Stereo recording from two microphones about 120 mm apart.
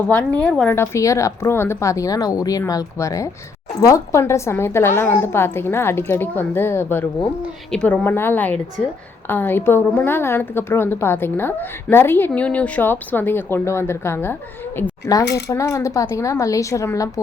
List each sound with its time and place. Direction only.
0.1 s a woman's voice: 10° left (ahead or behind)
0.7 s a woman's voice: 25° left (ahead or behind)
8.0 s a woman's voice: 20° left (ahead or behind)
8.8 s a woman's voice: centre (ahead or behind)
9.2 s a woman's voice: 15° left (ahead or behind)